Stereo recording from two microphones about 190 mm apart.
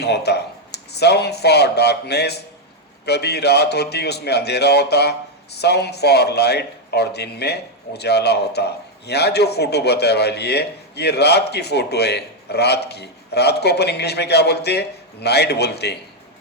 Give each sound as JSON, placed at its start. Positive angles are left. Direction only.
{"t": 0.0, "sound": "a man's voice", "side_deg": 60}